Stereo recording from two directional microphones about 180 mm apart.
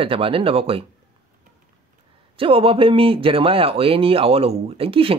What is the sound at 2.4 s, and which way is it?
Speech, 30° right (ahead or behind).